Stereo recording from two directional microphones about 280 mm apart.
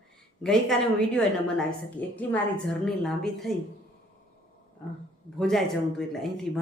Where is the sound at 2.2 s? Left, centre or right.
Centre.